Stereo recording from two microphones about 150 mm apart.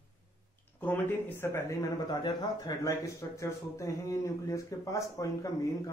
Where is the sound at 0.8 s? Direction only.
10° left (ahead or behind).